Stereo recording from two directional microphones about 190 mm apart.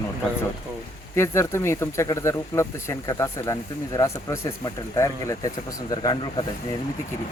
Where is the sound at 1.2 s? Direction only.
15° left (ahead or behind).